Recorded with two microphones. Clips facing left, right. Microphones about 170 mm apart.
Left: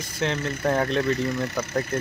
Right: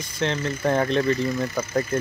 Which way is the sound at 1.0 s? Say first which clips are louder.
Right 2 dB; 70° left (ahead or behind).